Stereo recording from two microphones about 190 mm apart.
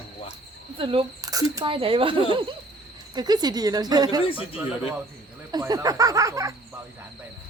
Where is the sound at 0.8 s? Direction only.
25° right (ahead or behind).